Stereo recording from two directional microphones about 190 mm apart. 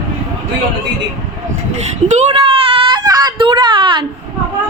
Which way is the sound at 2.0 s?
35° right (ahead or behind).